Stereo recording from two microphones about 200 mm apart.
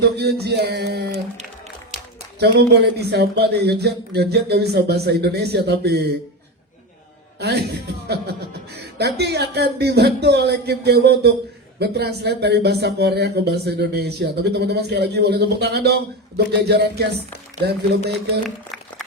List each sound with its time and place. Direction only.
0.0 s speech: 55° right (ahead or behind)
2.4 s speech: 55° right (ahead or behind)
7.3 s speech: 55° right (ahead or behind)